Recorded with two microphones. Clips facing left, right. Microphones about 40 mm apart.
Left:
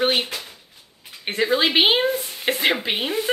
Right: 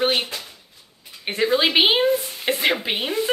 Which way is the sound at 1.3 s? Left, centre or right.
Centre.